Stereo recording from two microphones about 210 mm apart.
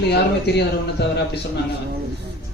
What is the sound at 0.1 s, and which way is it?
A man's voice, 50° left (ahead or behind).